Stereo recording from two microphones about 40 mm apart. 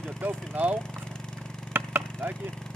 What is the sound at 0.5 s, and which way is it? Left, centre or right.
Speech, right.